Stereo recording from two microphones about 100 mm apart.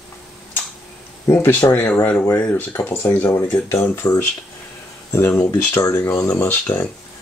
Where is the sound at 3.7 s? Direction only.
25° left (ahead or behind).